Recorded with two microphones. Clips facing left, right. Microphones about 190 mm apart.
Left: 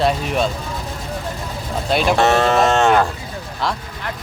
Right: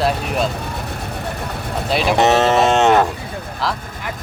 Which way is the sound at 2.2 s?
20° right (ahead or behind).